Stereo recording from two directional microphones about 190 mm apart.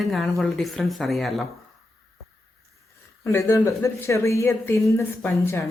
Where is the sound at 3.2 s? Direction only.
15° left (ahead or behind).